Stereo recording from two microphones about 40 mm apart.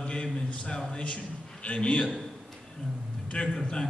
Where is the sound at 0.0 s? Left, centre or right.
Left.